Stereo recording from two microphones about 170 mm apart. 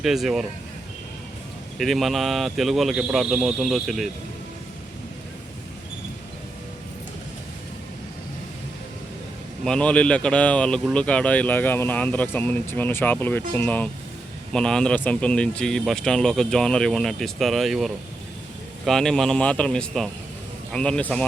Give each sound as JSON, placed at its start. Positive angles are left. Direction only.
{"t": 0.0, "sound": "speech", "side_deg": 0}
{"t": 1.8, "sound": "speech", "side_deg": 0}
{"t": 9.6, "sound": "speech", "side_deg": 5}